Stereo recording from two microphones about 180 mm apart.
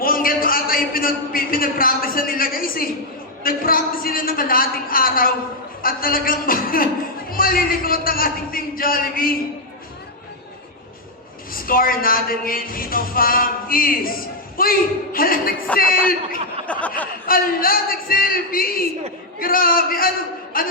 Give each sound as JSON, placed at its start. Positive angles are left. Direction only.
{"t": 0.0, "sound": "a man's voice", "side_deg": 50}
{"t": 3.4, "sound": "music", "side_deg": 55}
{"t": 11.5, "sound": "music", "side_deg": 55}
{"t": 16.7, "sound": "a sound", "side_deg": 5}
{"t": 17.2, "sound": "music", "side_deg": 55}
{"t": 20.5, "sound": "a sound", "side_deg": 55}